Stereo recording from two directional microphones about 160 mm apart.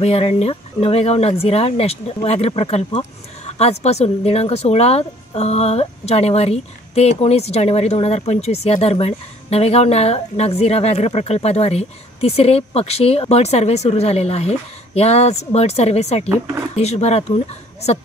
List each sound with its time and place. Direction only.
0.0 s speech: 40° left (ahead or behind)